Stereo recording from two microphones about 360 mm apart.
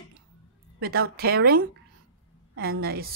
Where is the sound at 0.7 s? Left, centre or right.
Right.